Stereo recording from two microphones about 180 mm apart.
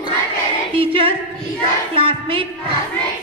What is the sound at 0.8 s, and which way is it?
A man's voice, 30° right (ahead or behind).